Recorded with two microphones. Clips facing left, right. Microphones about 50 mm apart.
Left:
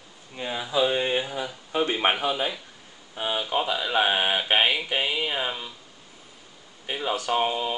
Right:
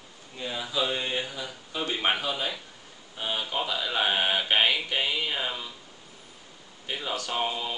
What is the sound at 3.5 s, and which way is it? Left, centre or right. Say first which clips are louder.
Speech: left 6 dB; centre.